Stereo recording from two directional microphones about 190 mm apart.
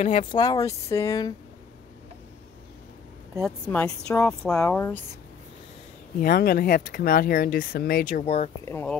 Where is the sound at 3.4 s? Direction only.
5° left (ahead or behind).